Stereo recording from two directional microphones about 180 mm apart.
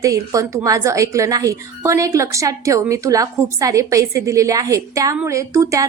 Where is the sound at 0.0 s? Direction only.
20° right (ahead or behind).